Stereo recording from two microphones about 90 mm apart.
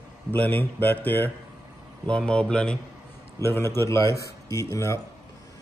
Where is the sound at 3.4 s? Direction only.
25° left (ahead or behind).